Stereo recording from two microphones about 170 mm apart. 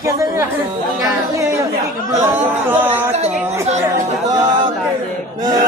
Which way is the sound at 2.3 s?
10° right (ahead or behind).